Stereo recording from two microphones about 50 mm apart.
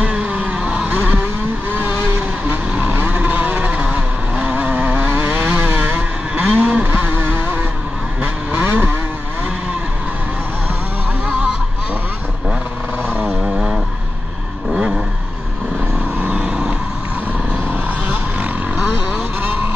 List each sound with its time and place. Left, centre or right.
0.0 s vehicle: right
2.7 s vehicle: right
8.6 s vehicle: right
11.2 s a sound: right
13.4 s vehicle: centre
16.2 s vehicle: right
16.4 s vehicle: centre
18.4 s vehicle: right